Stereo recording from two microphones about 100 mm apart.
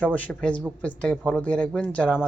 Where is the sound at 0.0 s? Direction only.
15° left (ahead or behind).